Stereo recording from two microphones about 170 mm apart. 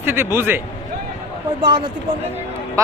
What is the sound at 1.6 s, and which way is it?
Speech, 30° right (ahead or behind).